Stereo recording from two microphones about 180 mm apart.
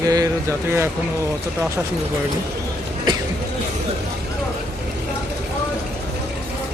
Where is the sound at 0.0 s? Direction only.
20° right (ahead or behind).